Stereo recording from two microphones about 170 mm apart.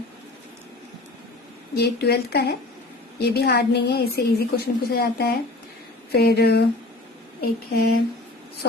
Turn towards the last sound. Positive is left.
turn(degrees=65)  # may be behind; listen again after turning